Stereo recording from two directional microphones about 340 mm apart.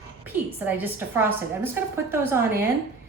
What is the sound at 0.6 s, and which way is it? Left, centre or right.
A woman's voice, centre.